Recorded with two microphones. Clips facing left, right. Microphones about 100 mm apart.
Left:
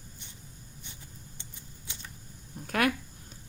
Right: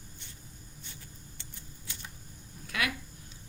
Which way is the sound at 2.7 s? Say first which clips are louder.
Left 7 dB; 45° left (ahead or behind).